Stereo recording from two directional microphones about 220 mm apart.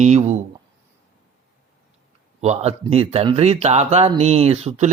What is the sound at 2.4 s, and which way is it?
A man's voice, 30° right (ahead or behind).